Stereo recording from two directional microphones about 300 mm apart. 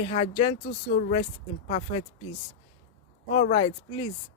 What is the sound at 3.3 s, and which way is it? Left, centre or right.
Speech, left.